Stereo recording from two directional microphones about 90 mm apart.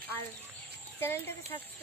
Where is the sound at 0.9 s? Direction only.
25° left (ahead or behind).